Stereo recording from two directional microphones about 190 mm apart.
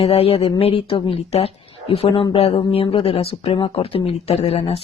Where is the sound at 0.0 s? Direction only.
30° left (ahead or behind).